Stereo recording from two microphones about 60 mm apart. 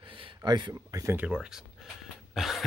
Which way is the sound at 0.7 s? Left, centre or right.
Right.